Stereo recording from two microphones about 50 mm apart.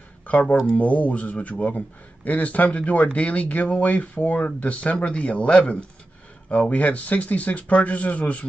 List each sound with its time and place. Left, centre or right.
0.3 s a man's voice: left